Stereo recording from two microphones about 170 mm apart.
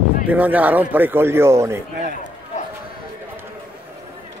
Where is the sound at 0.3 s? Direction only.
10° right (ahead or behind).